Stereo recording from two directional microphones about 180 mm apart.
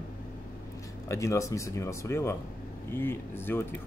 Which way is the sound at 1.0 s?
15° left (ahead or behind).